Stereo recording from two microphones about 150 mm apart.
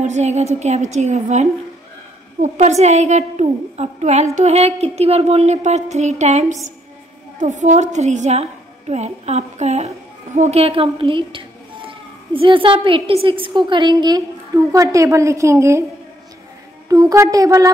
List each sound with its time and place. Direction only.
0.0 s a woman's voice: 50° right (ahead or behind); by 15.8 s 20° right (ahead or behind)
16.9 s music: 20° right (ahead or behind)